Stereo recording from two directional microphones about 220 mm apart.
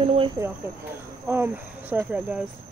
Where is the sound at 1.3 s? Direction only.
10° right (ahead or behind).